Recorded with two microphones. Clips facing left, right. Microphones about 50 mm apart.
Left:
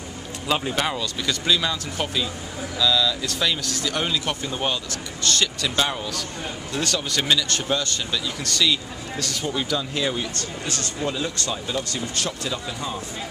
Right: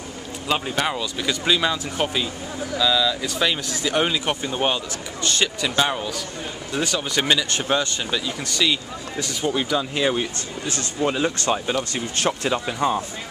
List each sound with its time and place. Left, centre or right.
0.5 s speech: centre; by 13.0 s right